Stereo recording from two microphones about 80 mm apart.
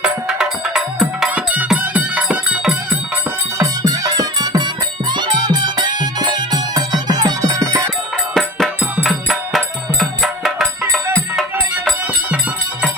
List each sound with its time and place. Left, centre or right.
0.0 s music: centre
3.6 s music: right
5.1 s music: right
8.3 s music: centre